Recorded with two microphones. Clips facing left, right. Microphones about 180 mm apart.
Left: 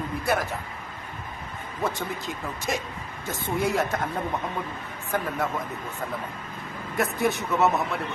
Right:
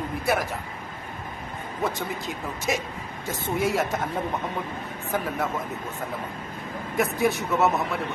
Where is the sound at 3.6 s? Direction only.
Centre (ahead or behind).